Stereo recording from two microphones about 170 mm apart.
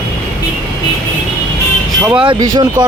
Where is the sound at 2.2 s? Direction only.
25° right (ahead or behind).